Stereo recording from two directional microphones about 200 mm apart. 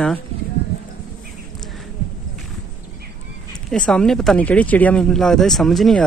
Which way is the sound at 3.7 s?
5° left (ahead or behind).